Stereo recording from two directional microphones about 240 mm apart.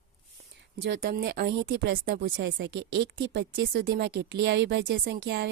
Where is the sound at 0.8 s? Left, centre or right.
Right.